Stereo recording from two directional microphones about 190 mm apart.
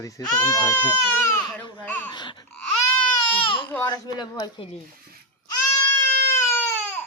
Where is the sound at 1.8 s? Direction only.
10° left (ahead or behind).